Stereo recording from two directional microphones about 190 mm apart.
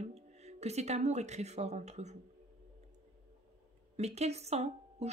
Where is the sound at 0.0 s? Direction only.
35° right (ahead or behind).